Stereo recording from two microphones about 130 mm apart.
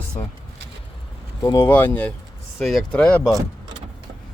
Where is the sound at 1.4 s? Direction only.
30° left (ahead or behind).